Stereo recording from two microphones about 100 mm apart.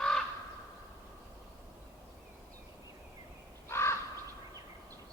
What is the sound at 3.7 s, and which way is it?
Crow, 25° left (ahead or behind).